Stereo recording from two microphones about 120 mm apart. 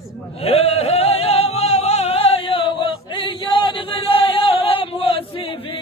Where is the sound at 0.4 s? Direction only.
55° left (ahead or behind).